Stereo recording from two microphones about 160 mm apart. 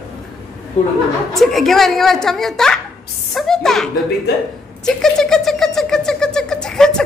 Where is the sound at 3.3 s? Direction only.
5° left (ahead or behind).